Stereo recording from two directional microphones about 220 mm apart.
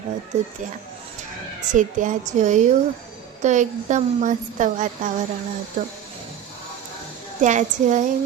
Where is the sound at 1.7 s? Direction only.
35° right (ahead or behind).